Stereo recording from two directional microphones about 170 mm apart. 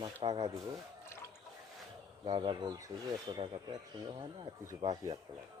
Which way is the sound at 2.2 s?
30° right (ahead or behind).